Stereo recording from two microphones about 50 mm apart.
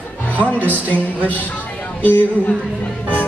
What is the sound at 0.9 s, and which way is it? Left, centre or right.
Music, left.